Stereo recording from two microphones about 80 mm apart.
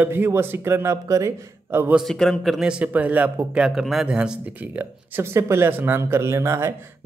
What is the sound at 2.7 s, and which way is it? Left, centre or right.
Speech, centre.